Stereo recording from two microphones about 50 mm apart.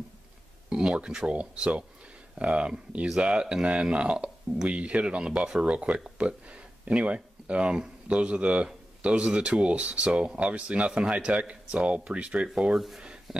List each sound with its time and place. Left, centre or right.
0.7 s speech: centre
12.7 s speech: centre